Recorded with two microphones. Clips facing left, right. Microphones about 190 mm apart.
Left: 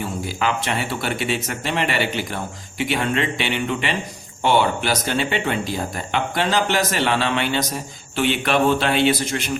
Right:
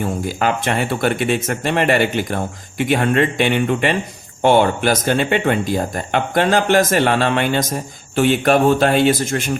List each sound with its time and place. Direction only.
0.0 s speech: 50° right (ahead or behind)